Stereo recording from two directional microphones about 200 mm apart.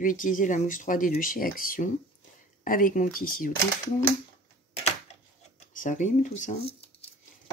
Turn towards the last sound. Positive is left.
turn(degrees=30)  # may be behind; listen again after turning